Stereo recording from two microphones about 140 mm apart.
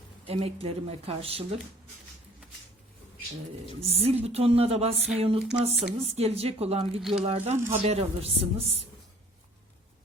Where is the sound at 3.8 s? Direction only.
45° right (ahead or behind).